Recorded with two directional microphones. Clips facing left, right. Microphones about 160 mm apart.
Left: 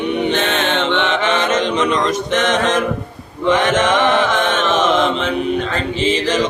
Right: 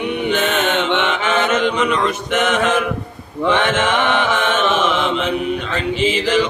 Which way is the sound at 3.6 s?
40° left (ahead or behind).